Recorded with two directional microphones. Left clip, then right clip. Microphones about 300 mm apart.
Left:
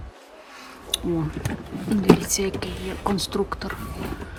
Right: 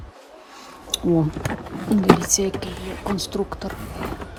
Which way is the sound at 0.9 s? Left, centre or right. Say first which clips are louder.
Right 2 dB; centre.